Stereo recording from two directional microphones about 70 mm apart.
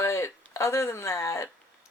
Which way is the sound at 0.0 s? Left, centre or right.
Left.